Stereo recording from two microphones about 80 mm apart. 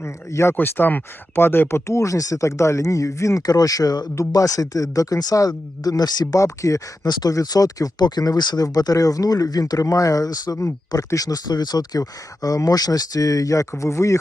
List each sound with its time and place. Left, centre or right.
0.0 s speech: left
0.5 s speech: left
6.4 s speech: left